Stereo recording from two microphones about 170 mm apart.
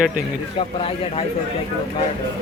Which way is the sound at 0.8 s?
35° left (ahead or behind).